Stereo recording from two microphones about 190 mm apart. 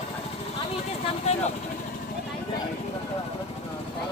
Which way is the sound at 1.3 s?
35° left (ahead or behind).